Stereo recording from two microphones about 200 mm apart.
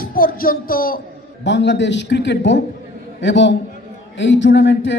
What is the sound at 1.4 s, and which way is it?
A man's voice, 60° left (ahead or behind).